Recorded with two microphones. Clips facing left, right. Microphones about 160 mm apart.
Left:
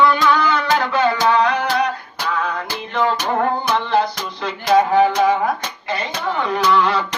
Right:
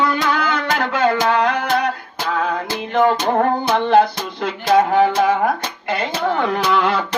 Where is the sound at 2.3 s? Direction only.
50° right (ahead or behind).